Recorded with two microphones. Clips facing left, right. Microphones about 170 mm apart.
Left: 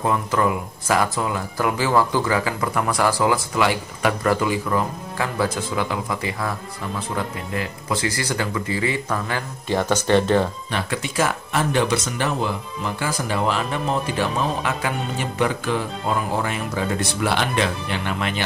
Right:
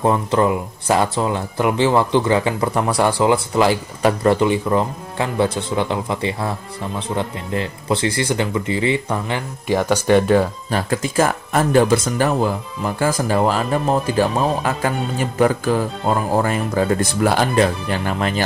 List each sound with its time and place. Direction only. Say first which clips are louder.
0.0 s speech: right 4 dB; 30° right (ahead or behind); by 10.5 s 10° right (ahead or behind)
10.7 s speech: right 5 dB; 40° right (ahead or behind)